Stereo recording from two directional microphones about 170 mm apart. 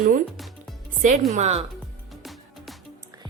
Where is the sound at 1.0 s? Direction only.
45° right (ahead or behind).